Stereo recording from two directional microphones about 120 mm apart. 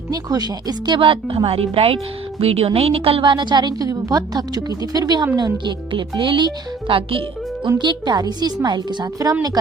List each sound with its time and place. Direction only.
0.1 s a woman's voice: 35° right (ahead or behind)